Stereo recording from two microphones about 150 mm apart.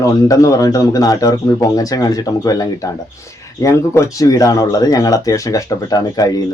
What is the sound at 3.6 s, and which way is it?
Speech, 20° left (ahead or behind).